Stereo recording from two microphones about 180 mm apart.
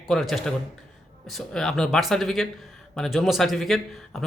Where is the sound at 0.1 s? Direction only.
Centre (ahead or behind).